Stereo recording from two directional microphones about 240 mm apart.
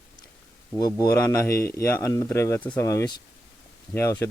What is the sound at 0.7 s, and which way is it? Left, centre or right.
Speech, centre.